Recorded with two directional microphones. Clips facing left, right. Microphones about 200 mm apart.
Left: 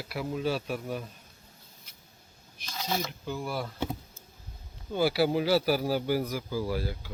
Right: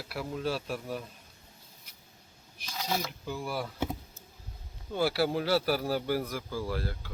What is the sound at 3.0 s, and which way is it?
A man's voice, centre (ahead or behind).